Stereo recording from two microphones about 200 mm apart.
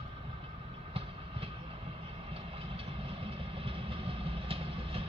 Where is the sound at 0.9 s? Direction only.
30° right (ahead or behind).